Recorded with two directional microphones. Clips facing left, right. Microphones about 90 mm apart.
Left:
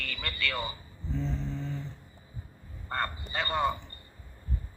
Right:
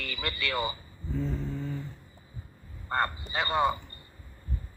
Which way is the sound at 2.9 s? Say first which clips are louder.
Right 3 dB; 20° right (ahead or behind).